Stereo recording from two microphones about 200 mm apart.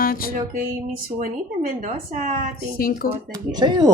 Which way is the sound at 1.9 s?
45° right (ahead or behind).